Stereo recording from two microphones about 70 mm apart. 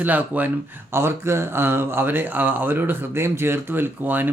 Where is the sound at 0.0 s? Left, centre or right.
Right.